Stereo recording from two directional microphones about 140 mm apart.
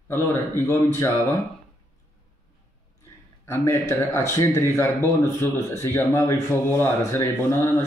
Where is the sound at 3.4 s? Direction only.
20° left (ahead or behind).